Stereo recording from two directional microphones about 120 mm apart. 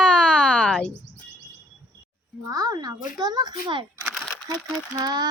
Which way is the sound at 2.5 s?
35° right (ahead or behind).